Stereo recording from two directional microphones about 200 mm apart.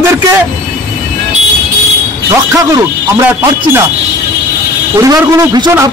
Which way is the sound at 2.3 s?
15° right (ahead or behind).